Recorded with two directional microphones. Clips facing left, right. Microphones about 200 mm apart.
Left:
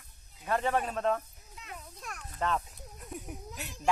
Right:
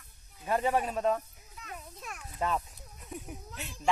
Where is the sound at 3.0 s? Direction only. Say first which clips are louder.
Even; centre (ahead or behind).